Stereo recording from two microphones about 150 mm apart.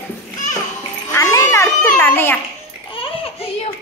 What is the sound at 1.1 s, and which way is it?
Speech, 20° left (ahead or behind).